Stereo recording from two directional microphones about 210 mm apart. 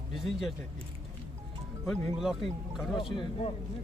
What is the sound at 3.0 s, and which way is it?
Speech, 25° left (ahead or behind).